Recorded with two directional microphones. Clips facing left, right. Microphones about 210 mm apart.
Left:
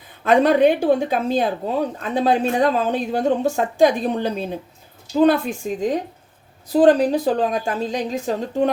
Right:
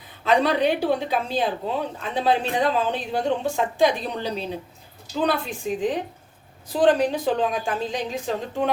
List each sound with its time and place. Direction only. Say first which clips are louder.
0.3 s a woman's voice: left 6 dB; 50° left (ahead or behind)